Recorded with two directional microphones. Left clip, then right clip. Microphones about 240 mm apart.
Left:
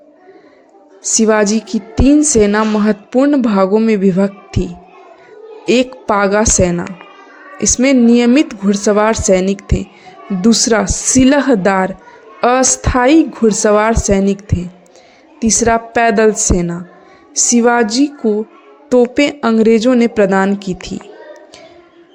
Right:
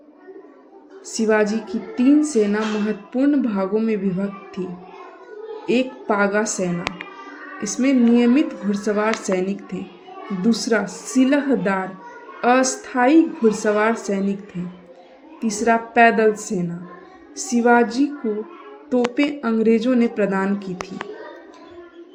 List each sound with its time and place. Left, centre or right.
1.0 s a woman's voice: left